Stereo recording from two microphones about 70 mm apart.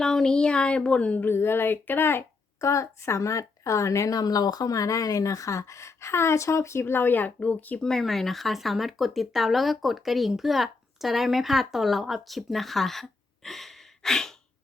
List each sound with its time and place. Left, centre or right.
0.0 s speech: centre
1.2 s speech: left
2.6 s a woman's voice: left
7.8 s speech: centre